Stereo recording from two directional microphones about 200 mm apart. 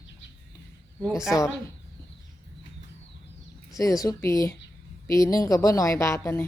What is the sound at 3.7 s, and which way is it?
A woman's voice, 15° left (ahead or behind).